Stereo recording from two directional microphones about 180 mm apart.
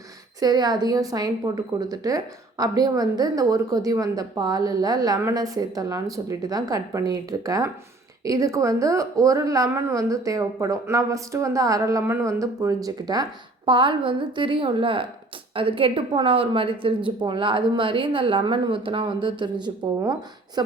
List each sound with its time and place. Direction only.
0.3 s a woman's voice: 20° right (ahead or behind)